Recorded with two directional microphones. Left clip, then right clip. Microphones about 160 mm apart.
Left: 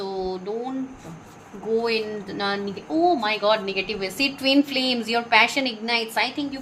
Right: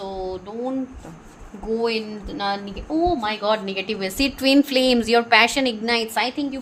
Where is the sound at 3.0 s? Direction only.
40° right (ahead or behind).